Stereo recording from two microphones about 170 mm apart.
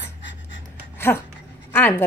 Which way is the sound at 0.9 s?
15° left (ahead or behind).